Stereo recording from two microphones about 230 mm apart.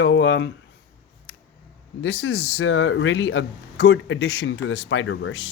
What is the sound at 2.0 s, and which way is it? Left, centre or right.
Speech, left.